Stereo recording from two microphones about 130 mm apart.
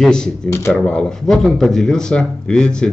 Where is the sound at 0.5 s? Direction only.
20° left (ahead or behind).